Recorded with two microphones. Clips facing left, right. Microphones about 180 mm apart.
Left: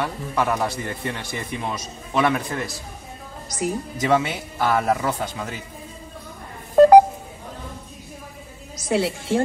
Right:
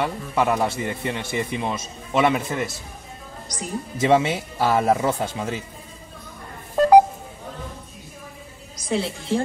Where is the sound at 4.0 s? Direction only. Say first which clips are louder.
Right 3 dB; 25° right (ahead or behind).